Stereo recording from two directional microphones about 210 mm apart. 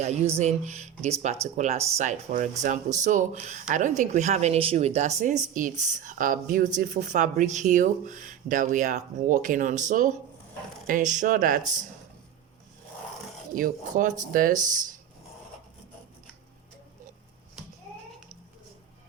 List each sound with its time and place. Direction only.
0.0 s speech: 30° right (ahead or behind)
13.6 s speech: 40° right (ahead or behind)